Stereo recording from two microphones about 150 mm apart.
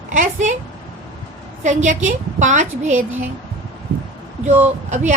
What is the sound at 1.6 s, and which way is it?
A woman's voice, 55° right (ahead or behind).